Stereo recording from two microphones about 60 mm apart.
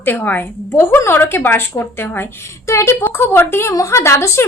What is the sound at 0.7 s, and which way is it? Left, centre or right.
A woman's voice, left.